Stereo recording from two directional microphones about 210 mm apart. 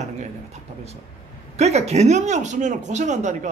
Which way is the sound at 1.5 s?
30° right (ahead or behind).